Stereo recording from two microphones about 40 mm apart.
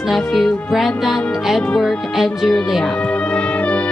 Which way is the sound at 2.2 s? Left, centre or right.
Centre.